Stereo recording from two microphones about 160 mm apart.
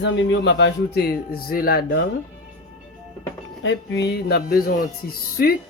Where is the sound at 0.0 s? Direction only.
90° left; by 2.0 s 75° left (ahead or behind).